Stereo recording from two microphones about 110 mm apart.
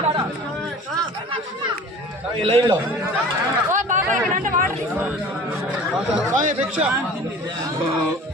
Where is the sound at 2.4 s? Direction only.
55° right (ahead or behind).